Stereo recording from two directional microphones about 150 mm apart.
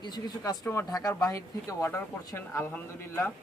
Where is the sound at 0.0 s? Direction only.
25° left (ahead or behind).